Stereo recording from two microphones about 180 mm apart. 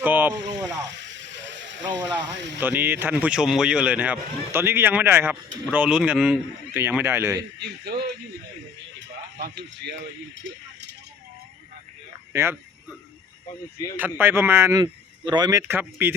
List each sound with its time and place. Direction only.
0.0 s a sound: 10° right (ahead or behind)
0.9 s snake: 80° right
2.0 s speech: 10° right (ahead or behind)
2.2 s speech: 80° right
2.6 s speech: 10° right (ahead or behind)
7.6 s a man's voice: 65° right (ahead or behind)
9.4 s speech: 70° right (ahead or behind)
12.3 s speech: 15° right (ahead or behind)
14.0 s speech: 10° right (ahead or behind)